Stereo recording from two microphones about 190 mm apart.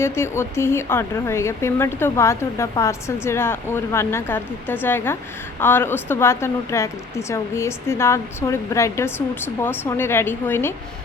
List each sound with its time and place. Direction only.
0.0 s speech: 15° left (ahead or behind)